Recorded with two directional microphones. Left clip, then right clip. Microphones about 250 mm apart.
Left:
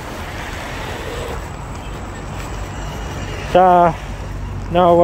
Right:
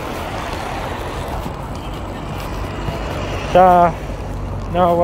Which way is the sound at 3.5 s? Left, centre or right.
Left.